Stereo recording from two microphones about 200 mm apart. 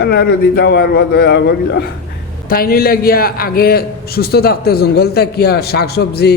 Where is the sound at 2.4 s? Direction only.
50° left (ahead or behind).